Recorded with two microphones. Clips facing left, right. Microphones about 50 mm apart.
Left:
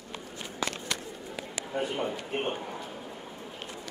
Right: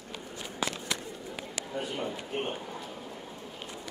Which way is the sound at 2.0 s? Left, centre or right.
Left.